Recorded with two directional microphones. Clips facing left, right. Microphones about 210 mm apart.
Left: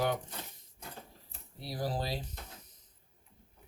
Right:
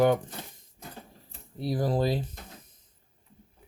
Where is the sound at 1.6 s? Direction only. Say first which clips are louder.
Right 9 dB; 50° right (ahead or behind).